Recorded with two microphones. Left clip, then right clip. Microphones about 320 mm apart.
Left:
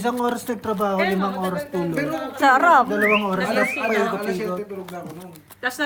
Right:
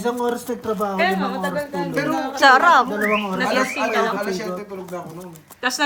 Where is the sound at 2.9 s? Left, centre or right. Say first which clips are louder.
Left 2 dB; left.